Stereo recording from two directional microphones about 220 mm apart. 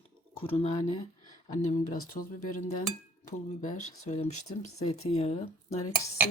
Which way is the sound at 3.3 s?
35° left (ahead or behind).